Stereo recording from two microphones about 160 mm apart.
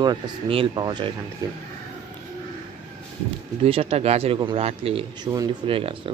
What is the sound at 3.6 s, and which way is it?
Speech, 40° right (ahead or behind).